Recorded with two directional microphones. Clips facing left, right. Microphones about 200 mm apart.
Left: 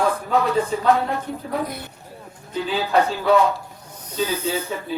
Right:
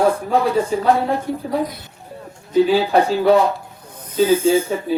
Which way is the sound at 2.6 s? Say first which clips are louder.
Right 5 dB; 30° right (ahead or behind).